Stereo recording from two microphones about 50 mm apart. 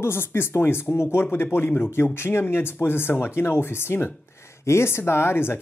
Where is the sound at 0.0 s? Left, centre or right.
Left.